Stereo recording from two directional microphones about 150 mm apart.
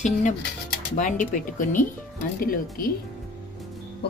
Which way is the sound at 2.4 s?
75° left (ahead or behind).